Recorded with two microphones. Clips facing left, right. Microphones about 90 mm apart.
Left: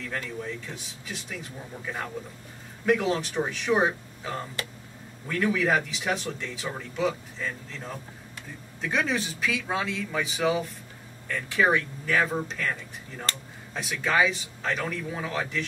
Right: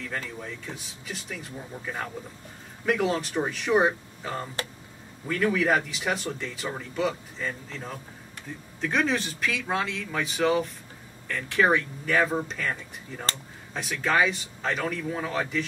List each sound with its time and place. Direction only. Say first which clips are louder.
0.0 s speech: left 1 dB; centre (ahead or behind)